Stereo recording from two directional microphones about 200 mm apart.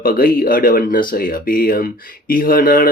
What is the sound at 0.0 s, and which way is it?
Speech, 45° left (ahead or behind).